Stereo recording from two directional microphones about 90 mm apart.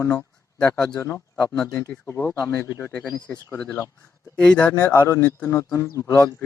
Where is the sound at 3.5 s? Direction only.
15° left (ahead or behind).